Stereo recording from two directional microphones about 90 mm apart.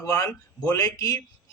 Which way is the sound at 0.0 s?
40° left (ahead or behind).